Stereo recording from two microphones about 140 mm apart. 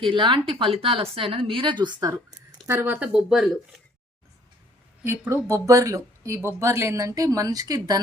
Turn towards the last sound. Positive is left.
turn(degrees=-25)  # may be behind; listen again after turning